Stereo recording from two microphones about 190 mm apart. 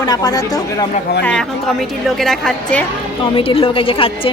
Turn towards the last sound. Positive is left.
turn(degrees=30)  # may be behind; listen again after turning